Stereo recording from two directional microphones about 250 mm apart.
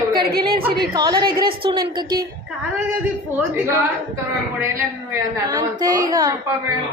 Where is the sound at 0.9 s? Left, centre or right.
Centre.